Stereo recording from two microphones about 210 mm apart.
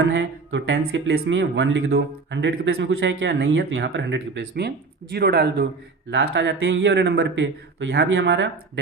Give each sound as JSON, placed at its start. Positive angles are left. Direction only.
{"t": 0.0, "sound": "speech", "side_deg": -60}